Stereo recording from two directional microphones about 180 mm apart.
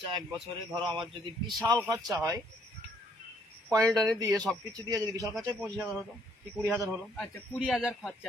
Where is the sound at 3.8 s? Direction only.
Centre (ahead or behind).